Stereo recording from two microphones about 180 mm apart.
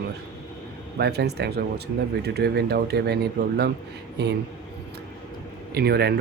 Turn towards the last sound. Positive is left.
turn(degrees=-65)  # may be behind; listen again after turning